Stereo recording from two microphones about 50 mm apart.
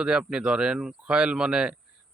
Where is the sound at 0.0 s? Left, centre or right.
Right.